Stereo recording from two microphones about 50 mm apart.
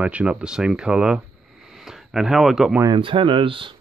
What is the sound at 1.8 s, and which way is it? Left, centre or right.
Speech, centre.